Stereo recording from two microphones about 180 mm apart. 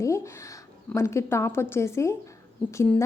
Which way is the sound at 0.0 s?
15° left (ahead or behind).